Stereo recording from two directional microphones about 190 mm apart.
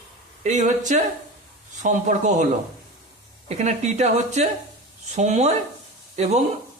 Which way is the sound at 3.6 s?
35° right (ahead or behind).